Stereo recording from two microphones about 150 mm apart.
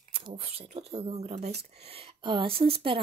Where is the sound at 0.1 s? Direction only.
40° right (ahead or behind).